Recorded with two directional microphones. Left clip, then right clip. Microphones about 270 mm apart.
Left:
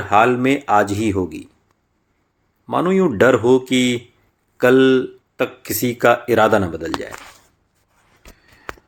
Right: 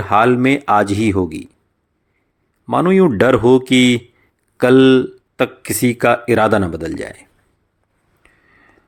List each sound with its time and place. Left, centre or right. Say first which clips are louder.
0.0 s speech: right 2 dB; right
2.6 s speech: right 4 dB; right